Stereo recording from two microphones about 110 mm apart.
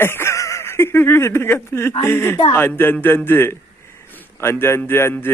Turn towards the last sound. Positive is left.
turn(degrees=20)  # may be behind; listen again after turning